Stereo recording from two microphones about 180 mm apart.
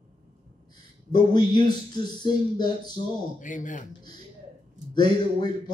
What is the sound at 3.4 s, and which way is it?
Speech, 45° left (ahead or behind).